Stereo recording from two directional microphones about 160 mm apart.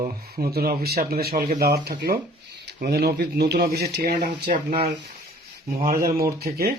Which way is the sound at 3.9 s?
75° right (ahead or behind).